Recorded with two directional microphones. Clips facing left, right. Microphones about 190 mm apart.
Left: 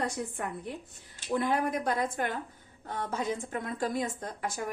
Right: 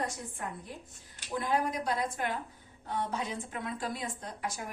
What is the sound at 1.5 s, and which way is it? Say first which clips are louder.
A woman's voice: right 2 dB; 55° left (ahead or behind).